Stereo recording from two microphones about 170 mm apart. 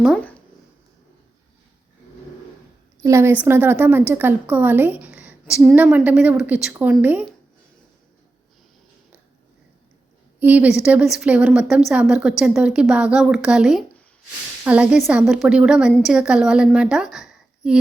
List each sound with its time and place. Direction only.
3.0 s a woman's voice: 15° right (ahead or behind)
10.4 s a woman's voice: 10° right (ahead or behind)